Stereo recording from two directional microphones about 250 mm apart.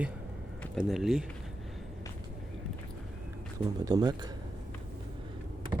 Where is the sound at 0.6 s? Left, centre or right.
Centre.